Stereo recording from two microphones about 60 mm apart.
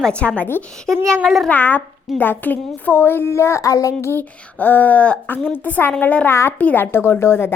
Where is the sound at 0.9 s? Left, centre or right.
Centre.